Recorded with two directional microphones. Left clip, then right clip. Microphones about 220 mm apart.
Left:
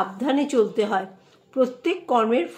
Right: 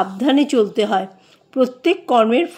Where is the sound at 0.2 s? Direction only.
45° right (ahead or behind).